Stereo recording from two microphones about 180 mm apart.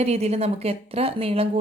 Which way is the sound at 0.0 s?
35° right (ahead or behind).